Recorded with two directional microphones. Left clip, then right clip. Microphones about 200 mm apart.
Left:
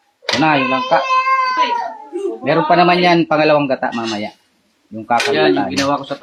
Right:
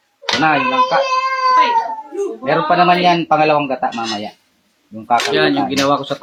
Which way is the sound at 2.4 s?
40° left (ahead or behind).